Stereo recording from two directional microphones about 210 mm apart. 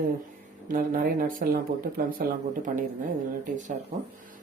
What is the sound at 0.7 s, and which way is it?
Speech, 40° right (ahead or behind).